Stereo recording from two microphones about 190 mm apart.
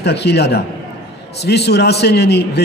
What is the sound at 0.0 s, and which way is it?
A man's voice, 60° left (ahead or behind).